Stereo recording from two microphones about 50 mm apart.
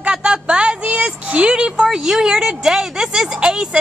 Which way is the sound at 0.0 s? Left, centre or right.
Centre.